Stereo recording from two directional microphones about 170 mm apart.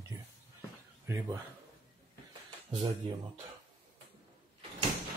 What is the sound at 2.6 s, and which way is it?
Speech, 35° right (ahead or behind).